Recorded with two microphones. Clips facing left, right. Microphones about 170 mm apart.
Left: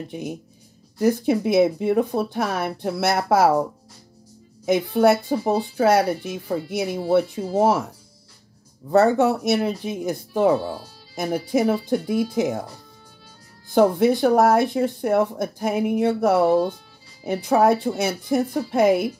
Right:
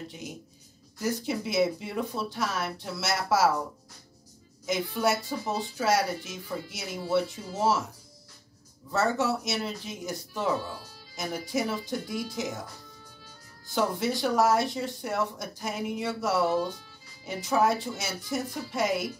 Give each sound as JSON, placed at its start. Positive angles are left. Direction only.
{"t": 0.9, "sound": "speech", "side_deg": 55}
{"t": 4.6, "sound": "speech", "side_deg": 60}
{"t": 8.9, "sound": "speech", "side_deg": 55}
{"t": 13.7, "sound": "speech", "side_deg": 55}